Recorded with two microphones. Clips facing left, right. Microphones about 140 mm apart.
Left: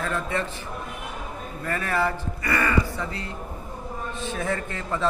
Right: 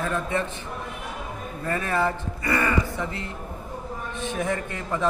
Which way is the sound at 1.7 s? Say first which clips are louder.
Right 1 dB; 20° right (ahead or behind).